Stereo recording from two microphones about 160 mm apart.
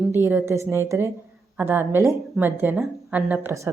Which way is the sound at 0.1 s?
15° right (ahead or behind).